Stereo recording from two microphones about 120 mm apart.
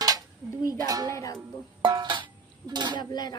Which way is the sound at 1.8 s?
40° right (ahead or behind).